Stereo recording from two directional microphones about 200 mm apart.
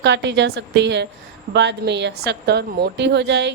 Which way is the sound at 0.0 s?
60° right (ahead or behind).